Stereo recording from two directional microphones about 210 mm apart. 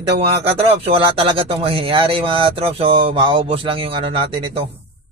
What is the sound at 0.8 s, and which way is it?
Speech, 25° right (ahead or behind).